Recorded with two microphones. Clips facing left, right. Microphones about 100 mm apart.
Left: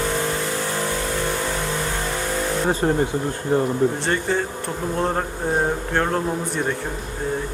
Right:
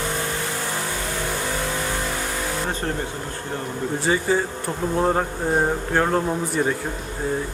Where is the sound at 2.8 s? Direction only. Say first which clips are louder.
Left 9 dB; 20° left (ahead or behind).